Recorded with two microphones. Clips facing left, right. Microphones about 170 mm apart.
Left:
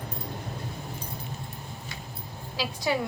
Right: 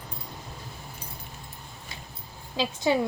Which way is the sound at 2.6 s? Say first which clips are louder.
Right 4 dB; 25° right (ahead or behind).